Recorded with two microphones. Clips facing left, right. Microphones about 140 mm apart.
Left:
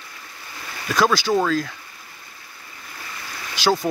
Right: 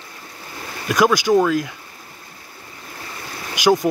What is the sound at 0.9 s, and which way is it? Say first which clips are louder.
Speech: right 4 dB; 15° right (ahead or behind).